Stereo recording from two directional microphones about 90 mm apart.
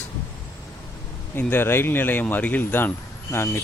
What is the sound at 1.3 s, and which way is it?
Speech, 20° left (ahead or behind).